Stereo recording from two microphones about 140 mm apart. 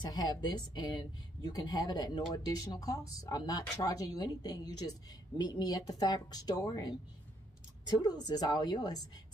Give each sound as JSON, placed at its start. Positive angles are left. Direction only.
{"t": 0.0, "sound": "speech", "side_deg": 30}
{"t": 8.0, "sound": "speech", "side_deg": 30}